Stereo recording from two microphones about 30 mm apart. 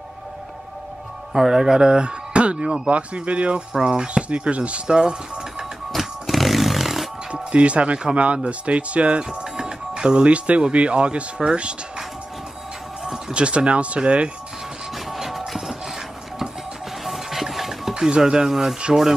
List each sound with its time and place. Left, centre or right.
1.5 s speech: right
3.8 s speech: right
4.8 s speech: right
5.9 s a sound: centre
7.5 s speech: right
9.2 s music: right
10.2 s speech: right
13.3 s speech: right
15.1 s music: centre
17.0 s music: centre
17.9 s speech: right
18.4 s speech: centre